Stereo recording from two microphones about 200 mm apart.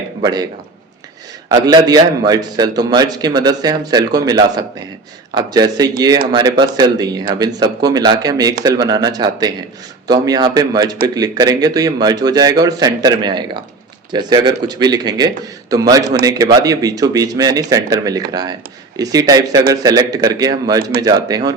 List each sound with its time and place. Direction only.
0.2 s a man's voice: 20° right (ahead or behind)
1.5 s a man's voice: 20° right (ahead or behind)